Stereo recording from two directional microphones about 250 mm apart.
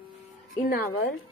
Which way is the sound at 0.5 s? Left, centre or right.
Left.